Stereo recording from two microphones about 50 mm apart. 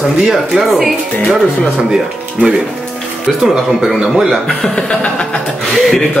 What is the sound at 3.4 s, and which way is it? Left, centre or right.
A woman's voice, centre.